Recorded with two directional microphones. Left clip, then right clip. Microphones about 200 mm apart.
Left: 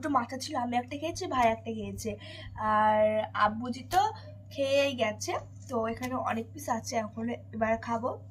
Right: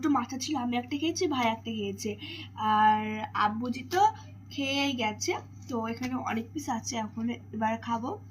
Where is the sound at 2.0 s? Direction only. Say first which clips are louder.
Right 2 dB; 25° left (ahead or behind).